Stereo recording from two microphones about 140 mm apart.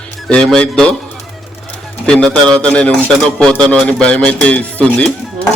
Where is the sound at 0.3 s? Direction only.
5° left (ahead or behind).